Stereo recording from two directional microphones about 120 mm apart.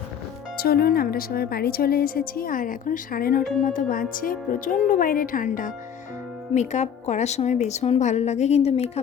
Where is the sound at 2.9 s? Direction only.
90° left.